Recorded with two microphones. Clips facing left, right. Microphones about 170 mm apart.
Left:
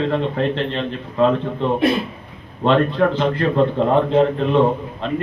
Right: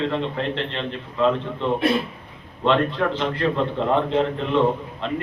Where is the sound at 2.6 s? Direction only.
45° left (ahead or behind).